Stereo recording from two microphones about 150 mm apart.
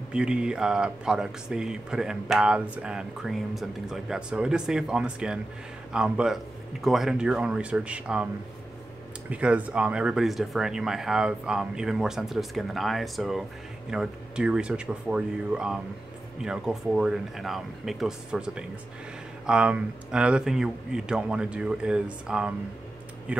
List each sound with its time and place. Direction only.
0.1 s speech: 5° right (ahead or behind)
9.3 s speech: 10° right (ahead or behind)